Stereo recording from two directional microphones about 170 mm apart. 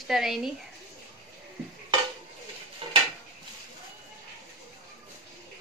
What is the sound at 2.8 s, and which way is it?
Dishes, 35° right (ahead or behind).